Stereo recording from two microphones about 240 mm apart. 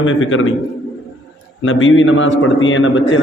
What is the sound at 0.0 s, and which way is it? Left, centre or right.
Speech, left.